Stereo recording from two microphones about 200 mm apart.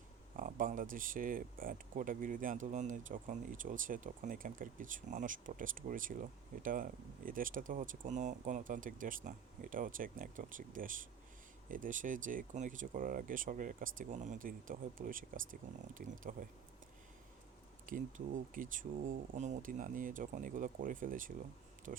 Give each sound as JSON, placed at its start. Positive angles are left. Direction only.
{"t": 0.3, "sound": "speech", "side_deg": -40}
{"t": 17.8, "sound": "speech", "side_deg": -40}